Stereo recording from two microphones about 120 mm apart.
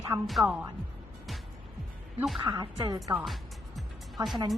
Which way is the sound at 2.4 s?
40° right (ahead or behind).